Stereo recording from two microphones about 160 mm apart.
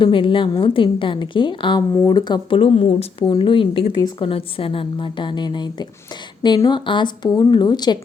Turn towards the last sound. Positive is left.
turn(degrees=25)  # may be behind; listen again after turning